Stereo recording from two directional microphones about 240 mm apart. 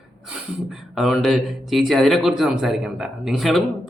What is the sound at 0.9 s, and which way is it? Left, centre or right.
A man's voice, centre.